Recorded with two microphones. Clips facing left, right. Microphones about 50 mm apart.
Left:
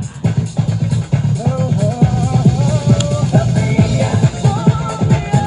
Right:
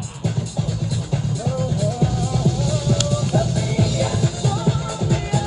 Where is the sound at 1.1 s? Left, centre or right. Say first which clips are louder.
Left 5 dB; left.